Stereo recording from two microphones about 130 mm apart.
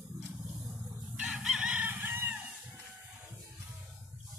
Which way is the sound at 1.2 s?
5° right (ahead or behind).